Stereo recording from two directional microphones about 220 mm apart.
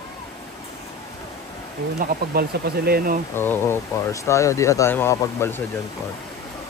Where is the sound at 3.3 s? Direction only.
10° left (ahead or behind).